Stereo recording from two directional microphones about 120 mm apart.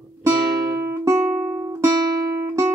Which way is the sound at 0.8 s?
25° right (ahead or behind).